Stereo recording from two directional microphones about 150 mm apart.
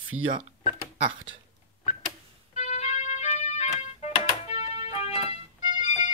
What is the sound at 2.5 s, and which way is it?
Music, 50° left (ahead or behind).